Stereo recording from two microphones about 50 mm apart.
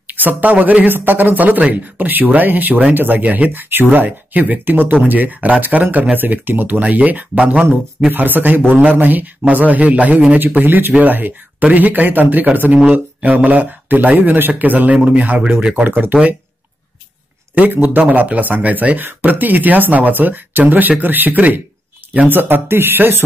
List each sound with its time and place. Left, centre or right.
0.0 s a man's voice: right
8.1 s a man's voice: right
15.7 s a man's voice: right
17.6 s a man's voice: right